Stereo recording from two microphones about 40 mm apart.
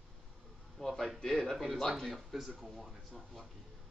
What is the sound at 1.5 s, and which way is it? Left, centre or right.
Speech, centre.